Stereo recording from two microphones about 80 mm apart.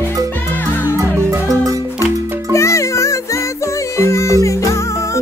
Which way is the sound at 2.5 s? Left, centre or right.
Left.